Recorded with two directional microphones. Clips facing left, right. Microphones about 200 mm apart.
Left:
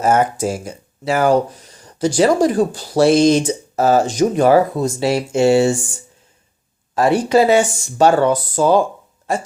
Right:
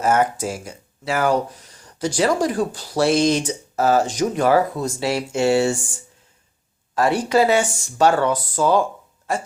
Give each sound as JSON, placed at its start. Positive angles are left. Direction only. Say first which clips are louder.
{"t": 0.0, "sound": "speech", "louder": "left 3 dB", "side_deg": 30}
{"t": 6.9, "sound": "speech", "louder": "left 4 dB", "side_deg": 25}